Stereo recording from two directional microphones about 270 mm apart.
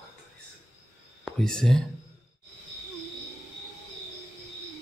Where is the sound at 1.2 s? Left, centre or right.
Centre.